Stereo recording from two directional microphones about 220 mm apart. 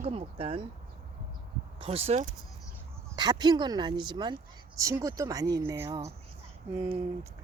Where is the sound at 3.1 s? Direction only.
20° right (ahead or behind).